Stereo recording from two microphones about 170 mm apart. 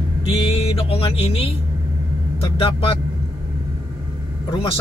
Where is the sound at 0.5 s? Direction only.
35° left (ahead or behind).